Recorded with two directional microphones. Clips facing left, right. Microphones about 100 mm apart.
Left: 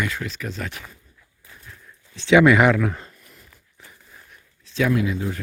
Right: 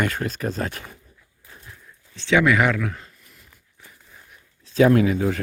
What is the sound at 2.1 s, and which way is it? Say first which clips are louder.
Speech: left 4 dB; 15° left (ahead or behind).